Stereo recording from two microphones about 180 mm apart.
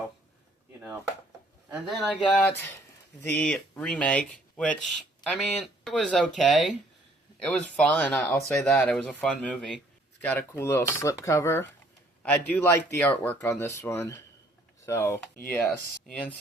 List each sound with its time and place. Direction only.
1.7 s speech: 5° right (ahead or behind)